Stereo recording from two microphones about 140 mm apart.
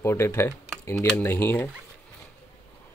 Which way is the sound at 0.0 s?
20° left (ahead or behind).